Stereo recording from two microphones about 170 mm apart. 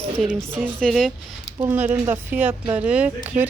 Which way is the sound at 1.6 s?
10° right (ahead or behind).